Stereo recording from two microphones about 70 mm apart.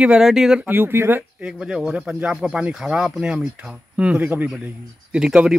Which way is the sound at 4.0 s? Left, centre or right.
Centre.